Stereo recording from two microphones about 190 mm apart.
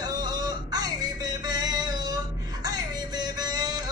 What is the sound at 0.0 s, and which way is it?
Music, 20° right (ahead or behind).